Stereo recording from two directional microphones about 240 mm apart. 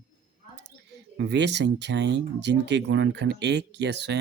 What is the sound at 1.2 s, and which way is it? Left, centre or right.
Speech, right.